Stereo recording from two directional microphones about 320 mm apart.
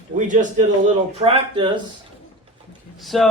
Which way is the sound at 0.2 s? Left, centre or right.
Right.